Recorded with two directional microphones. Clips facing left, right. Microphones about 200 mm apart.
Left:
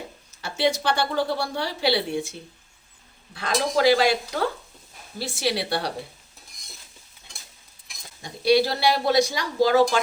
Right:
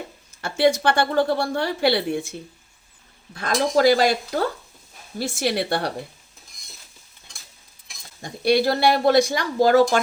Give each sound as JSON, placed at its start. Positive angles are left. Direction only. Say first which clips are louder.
{"t": 0.4, "sound": "a woman's voice", "louder": "right 5 dB", "side_deg": -55}
{"t": 3.3, "sound": "a woman's voice", "louder": "right 3 dB", "side_deg": -45}
{"t": 5.2, "sound": "a woman's voice", "louder": "right 3 dB", "side_deg": -50}
{"t": 8.2, "sound": "a woman's voice", "louder": "even", "side_deg": -50}